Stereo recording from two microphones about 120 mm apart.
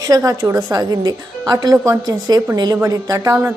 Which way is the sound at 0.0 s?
30° right (ahead or behind).